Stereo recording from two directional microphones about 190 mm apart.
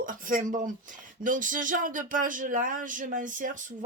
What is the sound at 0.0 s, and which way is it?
Speech, 45° right (ahead or behind).